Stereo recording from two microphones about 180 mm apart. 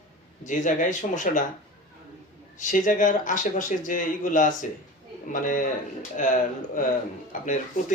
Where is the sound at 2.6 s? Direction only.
45° left (ahead or behind).